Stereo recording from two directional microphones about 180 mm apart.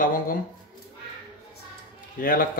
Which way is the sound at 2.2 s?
50° left (ahead or behind).